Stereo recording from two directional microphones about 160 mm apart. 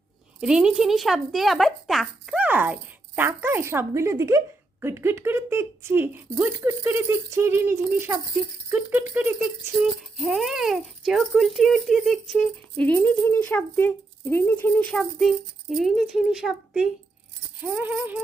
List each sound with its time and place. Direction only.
0.3 s rattle: 5° right (ahead or behind)
3.2 s speech: 15° right (ahead or behind)
8.7 s rattle: 10° right (ahead or behind)
12.7 s speech: 10° left (ahead or behind); by 18.2 s 10° right (ahead or behind)